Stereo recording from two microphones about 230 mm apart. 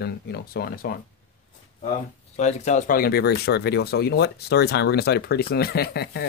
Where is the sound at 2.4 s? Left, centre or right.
Left.